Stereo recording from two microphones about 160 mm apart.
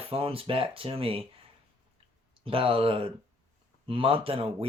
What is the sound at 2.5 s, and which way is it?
Speech, 35° right (ahead or behind).